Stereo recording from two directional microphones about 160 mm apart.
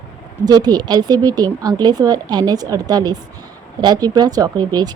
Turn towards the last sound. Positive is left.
turn(degrees=-25)  # may be behind; listen again after turning